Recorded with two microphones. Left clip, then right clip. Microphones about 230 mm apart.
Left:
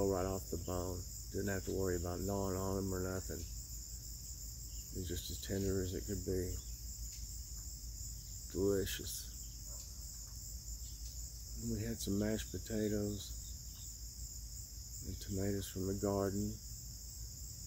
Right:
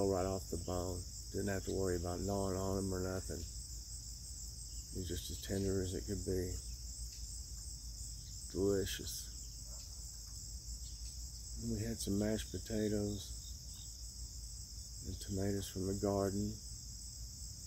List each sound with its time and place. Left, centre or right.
0.0 s cricket: centre
5.0 s cricket: centre
8.5 s cricket: centre
11.7 s cricket: centre
15.2 s cricket: centre